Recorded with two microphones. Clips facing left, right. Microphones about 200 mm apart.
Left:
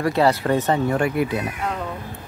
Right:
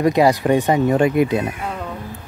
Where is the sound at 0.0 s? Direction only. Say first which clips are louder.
Right 4 dB; 15° right (ahead or behind).